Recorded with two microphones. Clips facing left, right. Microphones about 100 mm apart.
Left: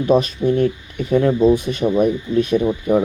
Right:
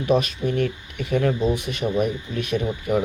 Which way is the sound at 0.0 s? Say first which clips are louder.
Left 5 dB; 30° left (ahead or behind).